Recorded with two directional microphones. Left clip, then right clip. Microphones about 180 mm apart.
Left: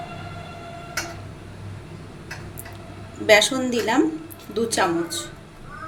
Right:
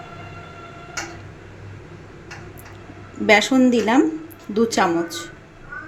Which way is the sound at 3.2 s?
30° right (ahead or behind).